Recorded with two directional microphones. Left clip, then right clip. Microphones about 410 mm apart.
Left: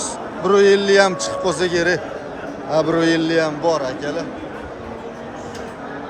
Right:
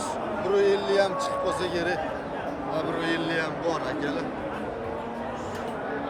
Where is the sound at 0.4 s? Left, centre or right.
Left.